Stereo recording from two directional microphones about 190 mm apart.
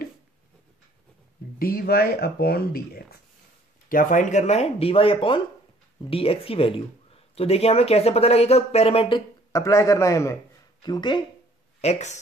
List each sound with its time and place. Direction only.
1.6 s speech: 50° left (ahead or behind); by 11.2 s 20° left (ahead or behind)
11.8 s speech: 35° left (ahead or behind)